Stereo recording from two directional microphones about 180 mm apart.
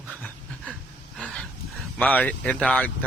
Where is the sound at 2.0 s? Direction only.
10° left (ahead or behind).